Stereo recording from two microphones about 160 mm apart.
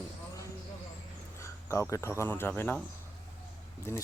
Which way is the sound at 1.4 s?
15° left (ahead or behind).